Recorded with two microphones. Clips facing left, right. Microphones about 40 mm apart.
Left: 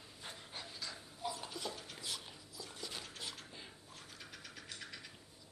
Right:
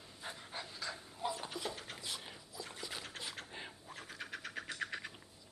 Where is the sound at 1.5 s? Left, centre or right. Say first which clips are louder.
Right 2 dB; right.